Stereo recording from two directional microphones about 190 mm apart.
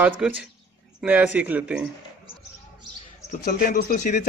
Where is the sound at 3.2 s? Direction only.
40° left (ahead or behind).